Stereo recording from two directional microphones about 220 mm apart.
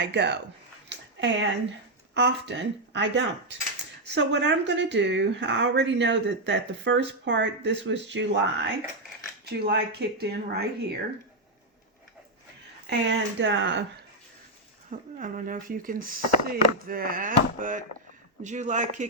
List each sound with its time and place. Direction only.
0.0 s speech: 50° right (ahead or behind)
0.9 s a sound: 55° right (ahead or behind)
2.1 s speech: 50° right (ahead or behind)
13.1 s speech: 55° right (ahead or behind)
14.8 s speech: 35° right (ahead or behind)